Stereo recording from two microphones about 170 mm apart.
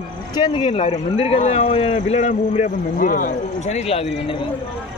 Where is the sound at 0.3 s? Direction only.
30° left (ahead or behind).